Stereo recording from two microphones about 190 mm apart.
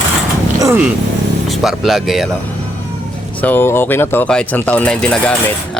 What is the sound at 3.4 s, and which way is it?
Speech, 10° left (ahead or behind).